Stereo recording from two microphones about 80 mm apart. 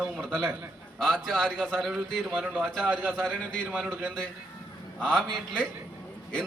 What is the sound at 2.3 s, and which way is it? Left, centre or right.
Speech, right.